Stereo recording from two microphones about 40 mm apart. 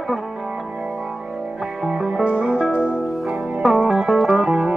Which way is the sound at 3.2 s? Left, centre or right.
Centre.